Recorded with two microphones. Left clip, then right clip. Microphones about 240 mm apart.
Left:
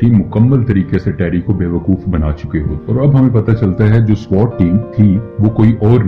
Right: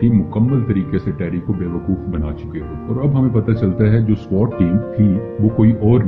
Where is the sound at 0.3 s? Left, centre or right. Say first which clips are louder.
Left 5 dB; left.